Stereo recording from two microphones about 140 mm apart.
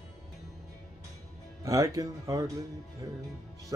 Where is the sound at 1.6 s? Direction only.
25° right (ahead or behind).